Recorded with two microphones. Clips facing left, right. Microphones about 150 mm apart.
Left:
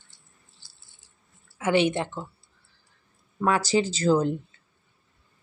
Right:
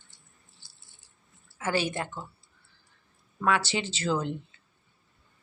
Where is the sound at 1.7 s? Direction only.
20° left (ahead or behind).